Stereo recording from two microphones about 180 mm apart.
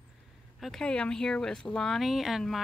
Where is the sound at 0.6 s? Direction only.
5° left (ahead or behind).